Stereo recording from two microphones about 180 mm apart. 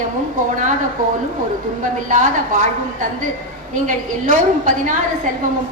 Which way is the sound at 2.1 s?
50° right (ahead or behind).